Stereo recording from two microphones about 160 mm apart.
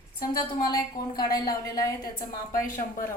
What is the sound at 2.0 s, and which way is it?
A woman's voice, 60° left (ahead or behind).